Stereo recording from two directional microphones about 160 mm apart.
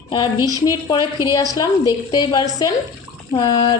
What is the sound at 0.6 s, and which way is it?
A woman's voice, 25° left (ahead or behind).